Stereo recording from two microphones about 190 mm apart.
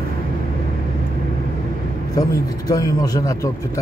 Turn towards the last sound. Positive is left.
turn(degrees=20)  # may be behind; listen again after turning